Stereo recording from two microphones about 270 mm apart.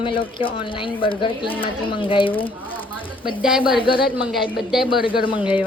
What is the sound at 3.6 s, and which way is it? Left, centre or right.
Speech, centre.